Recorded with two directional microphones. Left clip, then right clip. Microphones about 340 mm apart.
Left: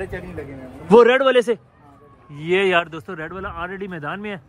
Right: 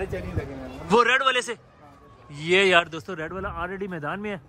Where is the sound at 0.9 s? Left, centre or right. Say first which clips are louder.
Left 7 dB; centre.